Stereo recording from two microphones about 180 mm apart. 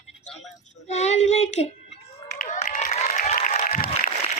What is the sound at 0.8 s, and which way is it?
Child singing, 40° left (ahead or behind).